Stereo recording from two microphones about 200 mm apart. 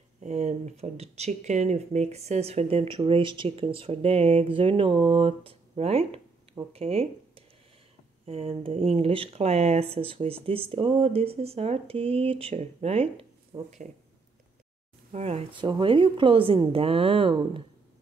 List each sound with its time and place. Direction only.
0.2 s speech: 35° right (ahead or behind)
15.1 s speech: 30° right (ahead or behind)